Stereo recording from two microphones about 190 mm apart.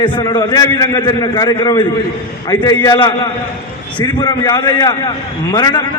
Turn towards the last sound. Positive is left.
turn(degrees=20)  # may be behind; listen again after turning